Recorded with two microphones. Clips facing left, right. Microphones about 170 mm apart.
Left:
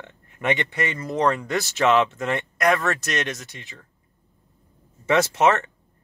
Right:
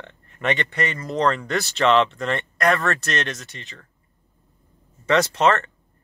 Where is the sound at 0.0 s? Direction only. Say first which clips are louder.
Right 1 dB; 15° left (ahead or behind).